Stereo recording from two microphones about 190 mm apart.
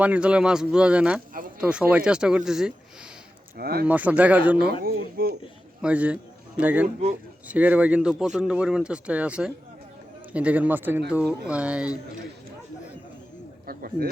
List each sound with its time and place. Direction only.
0.0 s speech: 5° right (ahead or behind)
1.3 s a sound: 45° right (ahead or behind)
1.6 s speech: 5° right (ahead or behind)
3.6 s speech: 55° right (ahead or behind)
3.8 s speech: 10° right (ahead or behind)
4.7 s speech: 50° right (ahead or behind)
5.8 s speech: 5° right (ahead or behind)
13.7 s speech: 50° right (ahead or behind)